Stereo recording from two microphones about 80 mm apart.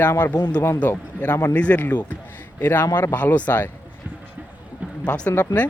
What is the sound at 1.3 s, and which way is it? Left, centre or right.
Speech, left.